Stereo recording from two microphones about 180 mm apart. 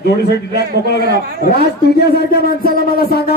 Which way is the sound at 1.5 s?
60° left (ahead or behind).